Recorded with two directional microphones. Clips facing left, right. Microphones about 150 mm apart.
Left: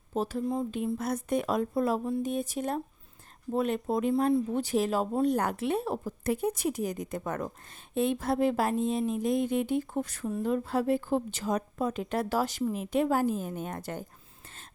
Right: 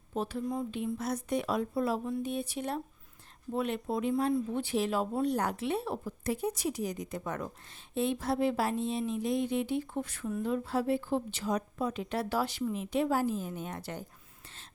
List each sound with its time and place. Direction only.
0.1 s speech: 40° left (ahead or behind)
10.4 s speech: 50° left (ahead or behind)